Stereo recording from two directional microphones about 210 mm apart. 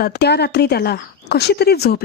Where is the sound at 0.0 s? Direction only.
50° left (ahead or behind).